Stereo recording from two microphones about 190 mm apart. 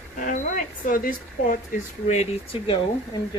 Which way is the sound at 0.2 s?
45° left (ahead or behind).